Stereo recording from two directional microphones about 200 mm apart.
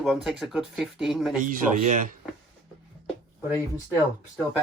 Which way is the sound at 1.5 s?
40° right (ahead or behind).